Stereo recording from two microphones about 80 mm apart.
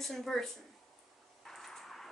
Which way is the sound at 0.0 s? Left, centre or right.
Centre.